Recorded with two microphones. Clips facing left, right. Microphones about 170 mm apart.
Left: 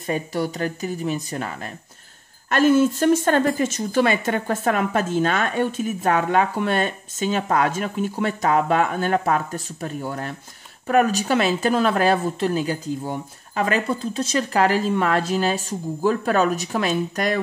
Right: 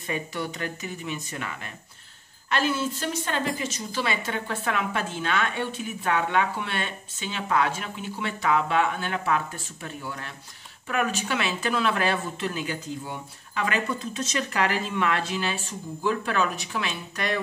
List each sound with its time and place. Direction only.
0.0 s a woman's voice: 40° left (ahead or behind)